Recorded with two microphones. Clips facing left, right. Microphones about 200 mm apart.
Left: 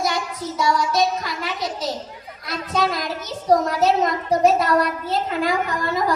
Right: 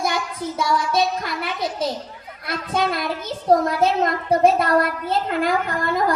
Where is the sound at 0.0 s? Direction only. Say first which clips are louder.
Even; 55° right (ahead or behind).